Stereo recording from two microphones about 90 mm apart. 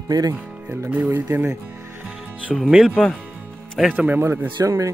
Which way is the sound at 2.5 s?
Centre (ahead or behind).